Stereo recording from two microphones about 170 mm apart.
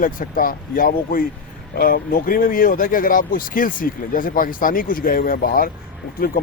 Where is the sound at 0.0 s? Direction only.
55° left (ahead or behind).